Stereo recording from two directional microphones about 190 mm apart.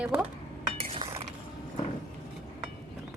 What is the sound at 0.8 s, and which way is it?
Cutlery, 30° right (ahead or behind).